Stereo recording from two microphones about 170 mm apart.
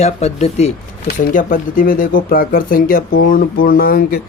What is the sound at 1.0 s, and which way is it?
Speech, 55° left (ahead or behind).